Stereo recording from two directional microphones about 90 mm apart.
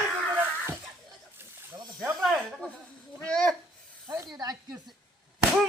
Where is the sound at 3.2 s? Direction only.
10° left (ahead or behind).